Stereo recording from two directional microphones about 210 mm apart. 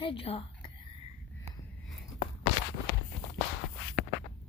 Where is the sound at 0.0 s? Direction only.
25° left (ahead or behind).